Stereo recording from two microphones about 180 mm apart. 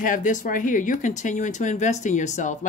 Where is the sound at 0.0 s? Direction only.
45° left (ahead or behind).